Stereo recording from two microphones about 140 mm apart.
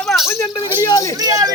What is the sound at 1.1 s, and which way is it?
Speech, 25° right (ahead or behind).